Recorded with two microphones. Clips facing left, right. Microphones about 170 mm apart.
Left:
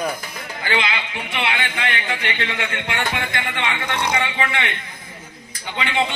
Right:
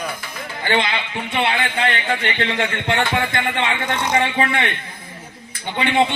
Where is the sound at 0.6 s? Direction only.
30° right (ahead or behind).